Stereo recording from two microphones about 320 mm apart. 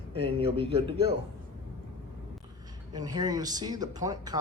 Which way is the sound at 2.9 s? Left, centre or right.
Centre.